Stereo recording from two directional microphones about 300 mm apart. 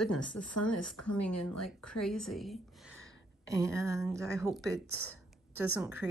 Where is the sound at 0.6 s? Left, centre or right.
Left.